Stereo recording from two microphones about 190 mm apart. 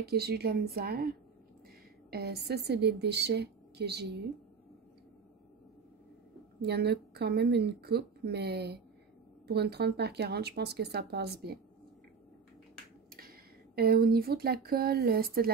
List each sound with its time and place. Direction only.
0.0 s a woman's voice: 55° right (ahead or behind)
6.6 s a woman's voice: 60° right (ahead or behind)
13.1 s speech: 50° right (ahead or behind)